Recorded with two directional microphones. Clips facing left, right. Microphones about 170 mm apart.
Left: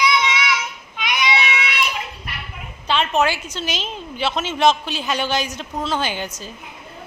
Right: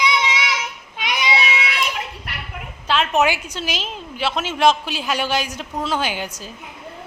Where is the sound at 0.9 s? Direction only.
30° right (ahead or behind).